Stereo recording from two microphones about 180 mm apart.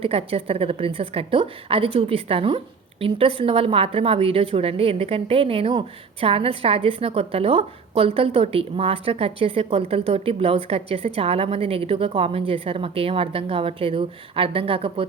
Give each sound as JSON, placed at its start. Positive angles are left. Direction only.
{"t": 0.0, "sound": "a woman's voice", "side_deg": -35}